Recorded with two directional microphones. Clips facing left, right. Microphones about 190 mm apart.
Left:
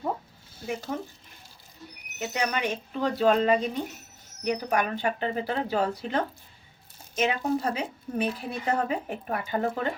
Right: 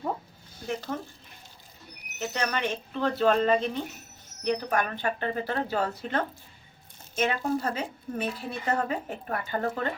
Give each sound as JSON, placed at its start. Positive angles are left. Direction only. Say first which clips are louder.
{"t": 0.9, "sound": "speech", "louder": "left 1 dB", "side_deg": 10}
{"t": 2.1, "sound": "speech", "louder": "left 1 dB", "side_deg": 10}